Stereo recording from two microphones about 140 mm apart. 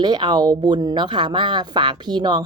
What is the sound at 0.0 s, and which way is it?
Speech, 30° right (ahead or behind).